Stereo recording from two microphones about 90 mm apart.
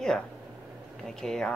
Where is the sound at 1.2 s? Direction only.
5° left (ahead or behind).